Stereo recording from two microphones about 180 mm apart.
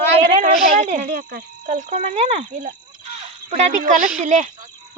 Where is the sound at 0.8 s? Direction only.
40° right (ahead or behind).